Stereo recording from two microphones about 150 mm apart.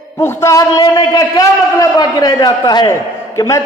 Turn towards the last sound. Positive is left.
turn(degrees=20)  # may be behind; listen again after turning